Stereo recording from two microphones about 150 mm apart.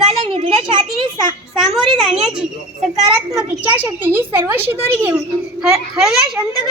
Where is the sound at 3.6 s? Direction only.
10° right (ahead or behind).